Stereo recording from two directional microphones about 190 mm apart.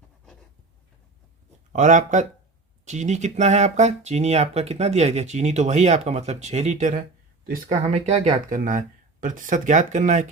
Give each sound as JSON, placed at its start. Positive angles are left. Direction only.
{"t": 1.7, "sound": "speech", "side_deg": -40}